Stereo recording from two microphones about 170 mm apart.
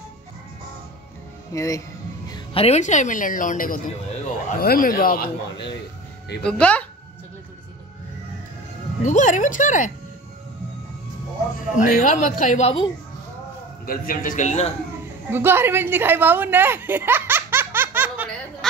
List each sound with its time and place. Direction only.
1.5 s speech: 20° left (ahead or behind)
2.2 s music: 25° left (ahead or behind)
2.6 s a woman's voice: 45° left (ahead or behind)
6.4 s speech: 5° left (ahead or behind)
9.0 s a woman's voice: 45° left (ahead or behind)
11.7 s a woman's voice: 50° left (ahead or behind)
13.8 s a woman's voice: 55° left (ahead or behind)
15.3 s a woman's voice: 15° right (ahead or behind)